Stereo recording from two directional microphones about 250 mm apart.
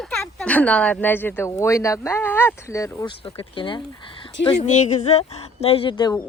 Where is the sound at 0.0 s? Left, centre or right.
Centre.